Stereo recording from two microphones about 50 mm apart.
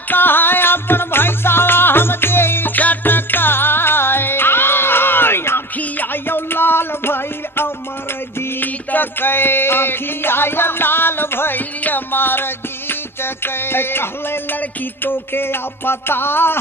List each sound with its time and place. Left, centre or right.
0.1 s music: left
15.0 s speech: left